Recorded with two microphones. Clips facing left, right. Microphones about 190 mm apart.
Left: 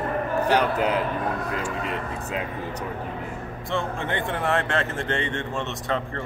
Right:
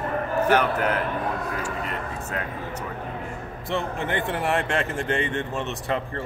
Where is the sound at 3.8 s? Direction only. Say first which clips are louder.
Right 1 dB; 15° right (ahead or behind).